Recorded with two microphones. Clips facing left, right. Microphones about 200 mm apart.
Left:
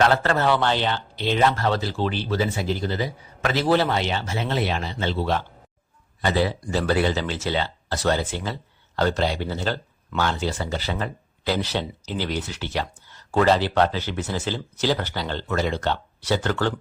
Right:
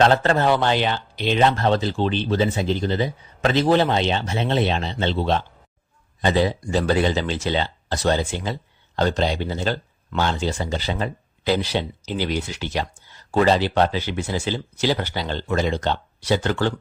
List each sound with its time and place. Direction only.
0.1 s speech: 20° right (ahead or behind)